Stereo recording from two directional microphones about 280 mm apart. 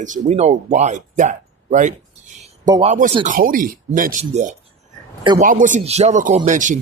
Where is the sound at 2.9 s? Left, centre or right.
Right.